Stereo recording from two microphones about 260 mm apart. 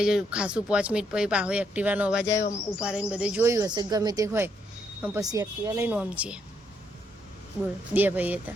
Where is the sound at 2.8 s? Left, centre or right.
Centre.